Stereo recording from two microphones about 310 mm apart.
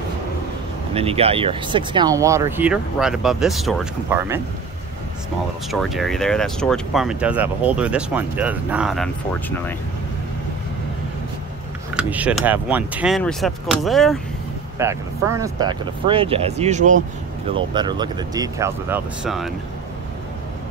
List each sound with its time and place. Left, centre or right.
0.9 s speech: centre
5.7 s speech: centre
11.9 s speech: centre